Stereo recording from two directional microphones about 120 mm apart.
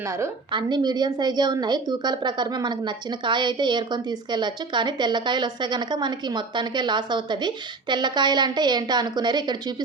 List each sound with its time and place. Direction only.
0.5 s a woman's voice: 35° right (ahead or behind)